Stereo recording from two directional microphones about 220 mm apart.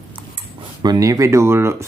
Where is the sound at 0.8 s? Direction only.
15° right (ahead or behind).